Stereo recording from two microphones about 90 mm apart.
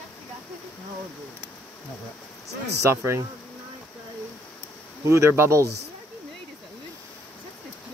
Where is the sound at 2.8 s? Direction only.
30° right (ahead or behind).